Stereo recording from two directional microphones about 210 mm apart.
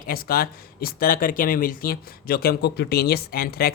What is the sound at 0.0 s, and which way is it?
Speech, 45° left (ahead or behind).